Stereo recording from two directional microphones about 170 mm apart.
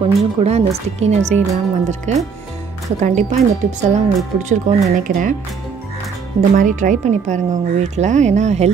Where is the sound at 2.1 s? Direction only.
45° right (ahead or behind).